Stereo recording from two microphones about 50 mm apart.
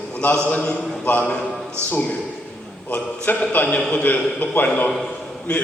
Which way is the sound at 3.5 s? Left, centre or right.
Left.